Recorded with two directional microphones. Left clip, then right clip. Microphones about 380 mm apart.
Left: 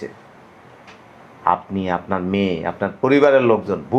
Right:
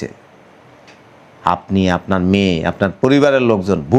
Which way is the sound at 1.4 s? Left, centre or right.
Right.